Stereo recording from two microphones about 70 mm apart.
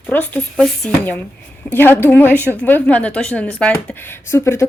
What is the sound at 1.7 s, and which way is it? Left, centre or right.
A woman's voice, left.